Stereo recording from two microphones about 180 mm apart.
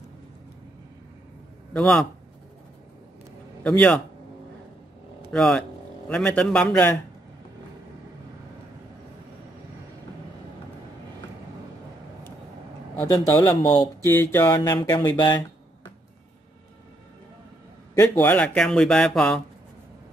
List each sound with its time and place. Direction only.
1.7 s speech: 5° left (ahead or behind)
3.6 s speech: 5° left (ahead or behind)
5.3 s a man's voice: 5° left (ahead or behind)
13.0 s speech: 20° left (ahead or behind)
17.9 s speech: 10° left (ahead or behind)